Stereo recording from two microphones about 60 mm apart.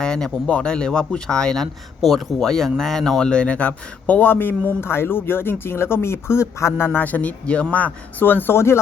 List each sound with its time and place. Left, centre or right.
0.0 s speech: centre; by 8.8 s left